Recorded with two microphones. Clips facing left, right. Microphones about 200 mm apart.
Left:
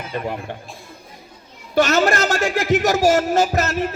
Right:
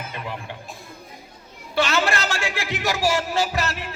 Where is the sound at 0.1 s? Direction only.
45° left (ahead or behind).